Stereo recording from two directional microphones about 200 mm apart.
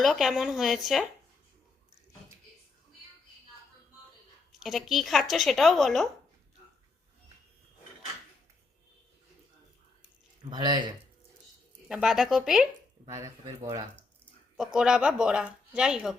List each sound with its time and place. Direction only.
0.0 s speech: centre (ahead or behind)
4.6 s speech: centre (ahead or behind)
10.5 s speech: 20° right (ahead or behind)
11.9 s speech: centre (ahead or behind)
13.1 s speech: 15° right (ahead or behind)
14.5 s speech: 5° right (ahead or behind)